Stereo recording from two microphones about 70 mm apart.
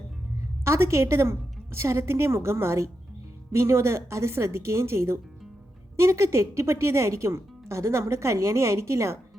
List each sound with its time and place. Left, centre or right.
0.6 s a woman's voice: right